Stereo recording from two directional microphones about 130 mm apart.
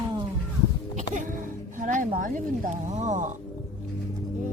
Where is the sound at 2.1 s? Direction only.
85° right.